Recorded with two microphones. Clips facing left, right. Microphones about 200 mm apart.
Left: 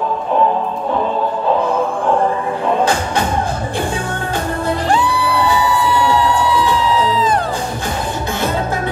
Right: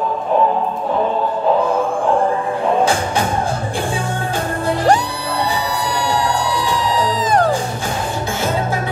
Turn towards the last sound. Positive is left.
turn(degrees=-45)  # may be behind; listen again after turning